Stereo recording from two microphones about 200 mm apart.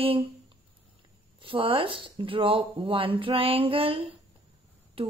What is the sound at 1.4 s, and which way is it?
Speech, 25° right (ahead or behind).